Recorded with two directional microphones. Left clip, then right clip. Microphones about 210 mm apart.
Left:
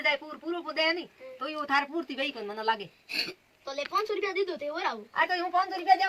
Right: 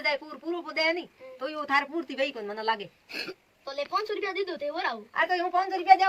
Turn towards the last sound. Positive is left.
turn(degrees=-5)  # may be behind; listen again after turning